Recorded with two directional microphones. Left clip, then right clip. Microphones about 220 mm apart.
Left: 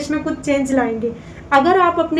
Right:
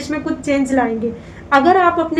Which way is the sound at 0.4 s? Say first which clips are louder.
Right 1 dB; 5° left (ahead or behind).